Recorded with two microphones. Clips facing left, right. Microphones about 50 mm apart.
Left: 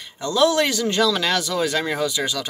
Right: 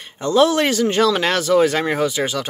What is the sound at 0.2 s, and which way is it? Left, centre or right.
Speech, right.